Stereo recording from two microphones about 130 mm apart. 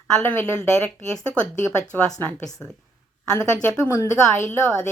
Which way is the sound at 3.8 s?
20° left (ahead or behind).